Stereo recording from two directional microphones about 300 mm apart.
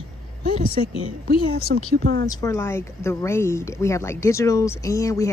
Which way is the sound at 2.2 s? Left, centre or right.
Centre.